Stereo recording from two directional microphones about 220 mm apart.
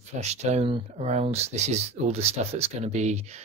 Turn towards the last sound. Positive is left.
turn(degrees=-30)  # may be behind; listen again after turning